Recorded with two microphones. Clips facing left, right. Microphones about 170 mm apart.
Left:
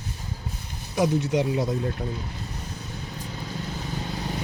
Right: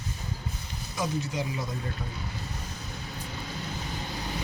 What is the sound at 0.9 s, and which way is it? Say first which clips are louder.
Speech: left 9 dB; 70° left (ahead or behind).